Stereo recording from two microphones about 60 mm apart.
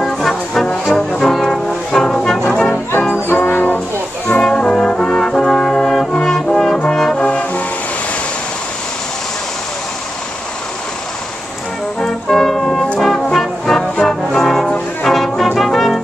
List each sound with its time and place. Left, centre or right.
0.0 s brass instrument: centre
1.1 s music: centre
1.9 s brass instrument: centre
2.5 s music: centre
3.3 s brass instrument: left
4.4 s brass instrument: centre
7.2 s music: centre
12.0 s music: centre
13.0 s brass instrument: centre